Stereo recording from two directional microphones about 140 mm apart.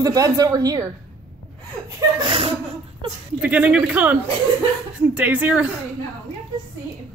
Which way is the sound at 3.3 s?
10° right (ahead or behind).